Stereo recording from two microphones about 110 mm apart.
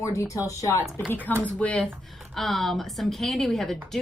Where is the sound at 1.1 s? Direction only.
15° left (ahead or behind).